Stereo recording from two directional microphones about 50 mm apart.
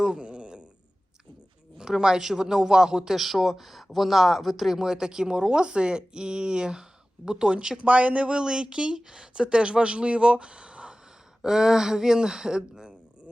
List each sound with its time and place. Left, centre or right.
0.0 s a sound: centre
1.8 s speech: centre
7.9 s speech: right
8.4 s speech: centre
11.4 s speech: centre